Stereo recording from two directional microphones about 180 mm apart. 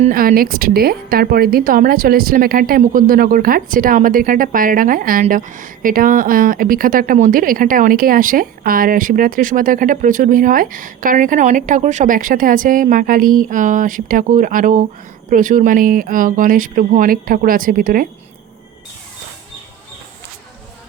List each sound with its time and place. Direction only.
0.1 s speech: 50° right (ahead or behind)